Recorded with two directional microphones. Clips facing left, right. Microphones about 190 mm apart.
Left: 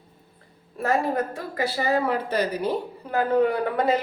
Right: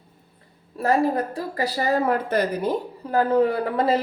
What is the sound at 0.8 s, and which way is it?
A woman's voice, 35° right (ahead or behind).